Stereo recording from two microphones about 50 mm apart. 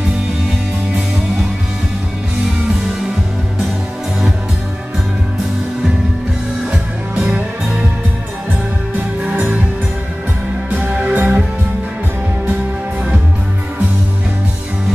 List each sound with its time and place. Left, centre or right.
10.7 s music: right